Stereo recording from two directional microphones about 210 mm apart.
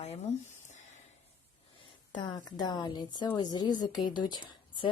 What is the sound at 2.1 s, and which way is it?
A woman's voice, 20° left (ahead or behind).